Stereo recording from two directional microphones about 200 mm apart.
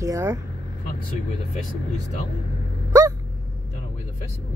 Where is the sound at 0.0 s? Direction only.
15° right (ahead or behind).